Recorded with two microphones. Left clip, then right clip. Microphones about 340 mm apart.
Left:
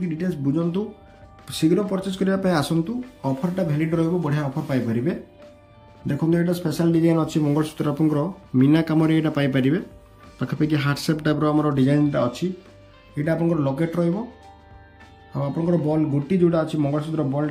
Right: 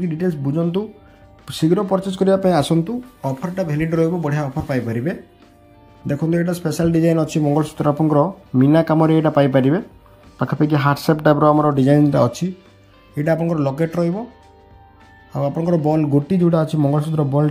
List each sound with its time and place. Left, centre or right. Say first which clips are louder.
0.1 s speech: right 1 dB; centre
12.1 s speech: right 6 dB; centre
13.1 s speech: right 4 dB; centre
15.3 s speech: right 4 dB; centre